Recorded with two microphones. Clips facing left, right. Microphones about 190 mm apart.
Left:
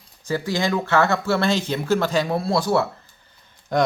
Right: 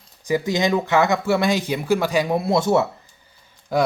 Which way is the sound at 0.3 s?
15° right (ahead or behind).